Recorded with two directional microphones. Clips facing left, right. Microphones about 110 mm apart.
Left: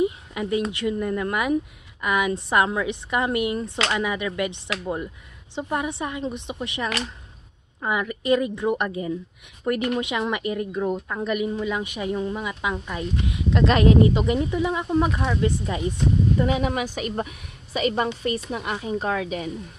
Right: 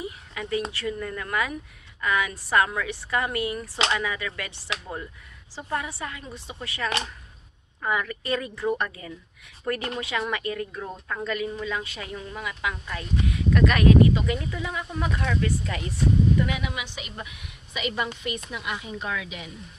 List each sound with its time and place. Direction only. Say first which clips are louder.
0.0 s a sound: left 10 dB; 25° left (ahead or behind)
0.7 s speech: left 6 dB; 20° left (ahead or behind)
16.3 s a woman's voice: left 5 dB; 35° left (ahead or behind)